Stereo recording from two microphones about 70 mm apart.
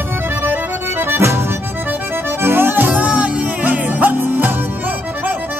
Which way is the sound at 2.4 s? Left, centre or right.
Right.